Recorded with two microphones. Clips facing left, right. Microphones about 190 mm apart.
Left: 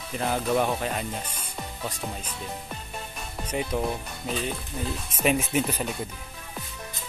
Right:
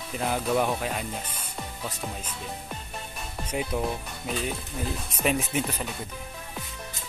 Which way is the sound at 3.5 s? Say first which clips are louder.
Left 1 dB; centre (ahead or behind).